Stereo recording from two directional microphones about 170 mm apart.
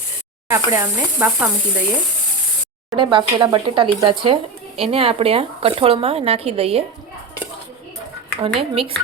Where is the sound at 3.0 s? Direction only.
30° right (ahead or behind).